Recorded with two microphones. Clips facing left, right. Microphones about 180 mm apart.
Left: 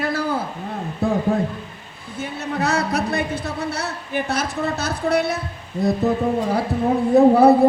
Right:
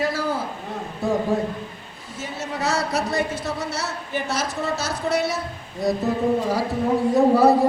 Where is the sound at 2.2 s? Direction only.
60° left (ahead or behind).